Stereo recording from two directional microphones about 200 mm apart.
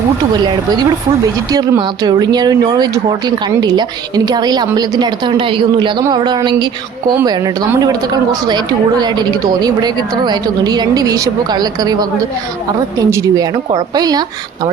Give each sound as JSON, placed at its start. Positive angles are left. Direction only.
{"t": 1.5, "sound": "speech", "side_deg": -20}